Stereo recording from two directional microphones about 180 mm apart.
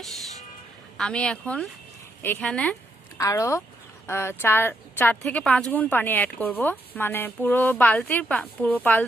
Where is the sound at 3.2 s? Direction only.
15° left (ahead or behind).